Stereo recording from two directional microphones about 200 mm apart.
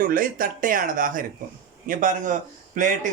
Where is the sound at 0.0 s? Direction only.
45° right (ahead or behind).